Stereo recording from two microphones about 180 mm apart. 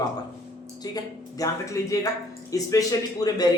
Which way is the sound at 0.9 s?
20° left (ahead or behind).